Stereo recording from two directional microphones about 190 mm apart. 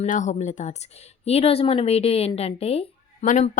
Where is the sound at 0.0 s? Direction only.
40° left (ahead or behind).